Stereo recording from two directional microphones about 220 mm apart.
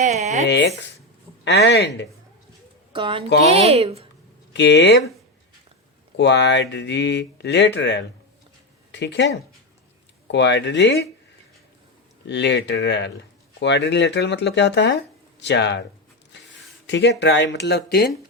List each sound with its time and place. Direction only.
0.0 s speech: 30° right (ahead or behind)
0.4 s speech: 55° left (ahead or behind)
2.9 s speech: 25° right (ahead or behind)
4.5 s speech: 50° left (ahead or behind)
6.1 s speech: 55° left (ahead or behind)
12.3 s speech: 55° left (ahead or behind)
16.8 s speech: 50° left (ahead or behind)